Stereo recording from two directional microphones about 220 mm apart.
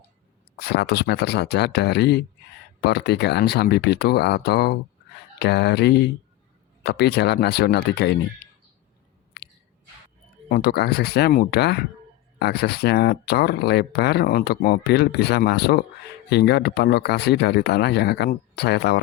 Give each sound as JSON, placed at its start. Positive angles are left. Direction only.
{"t": 0.6, "sound": "speech", "side_deg": 45}
{"t": 9.4, "sound": "a sound", "side_deg": 50}
{"t": 10.5, "sound": "speech", "side_deg": 45}